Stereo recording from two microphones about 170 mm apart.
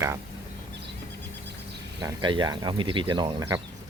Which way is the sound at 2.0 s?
25° right (ahead or behind).